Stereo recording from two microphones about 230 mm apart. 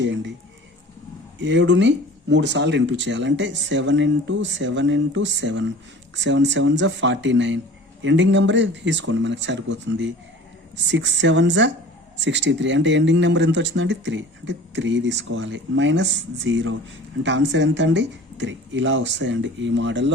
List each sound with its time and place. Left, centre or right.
0.0 s speech: right
1.4 s speech: right